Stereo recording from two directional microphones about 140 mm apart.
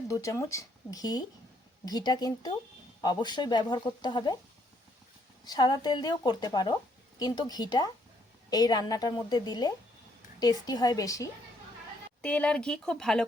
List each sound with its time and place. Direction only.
0.1 s speech: 20° left (ahead or behind)
5.5 s speech: 30° left (ahead or behind)
12.2 s speech: 10° left (ahead or behind)